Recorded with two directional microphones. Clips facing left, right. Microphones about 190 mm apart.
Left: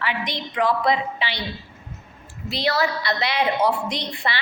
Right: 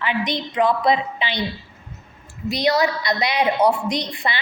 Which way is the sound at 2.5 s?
15° right (ahead or behind).